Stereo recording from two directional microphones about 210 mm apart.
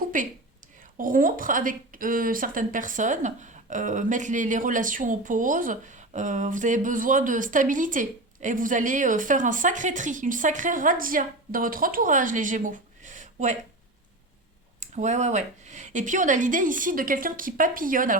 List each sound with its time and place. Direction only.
0.0 s a sound: 40° right (ahead or behind)
0.9 s a woman's voice: 40° right (ahead or behind)
14.8 s a woman's voice: 35° right (ahead or behind)